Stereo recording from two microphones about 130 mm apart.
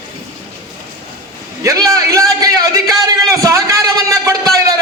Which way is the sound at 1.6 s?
25° right (ahead or behind).